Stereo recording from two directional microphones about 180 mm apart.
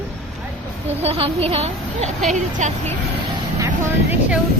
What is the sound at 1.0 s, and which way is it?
A child's voice, 35° right (ahead or behind).